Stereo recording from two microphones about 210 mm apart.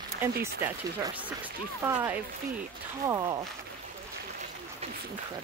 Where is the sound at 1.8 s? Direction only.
10° right (ahead or behind).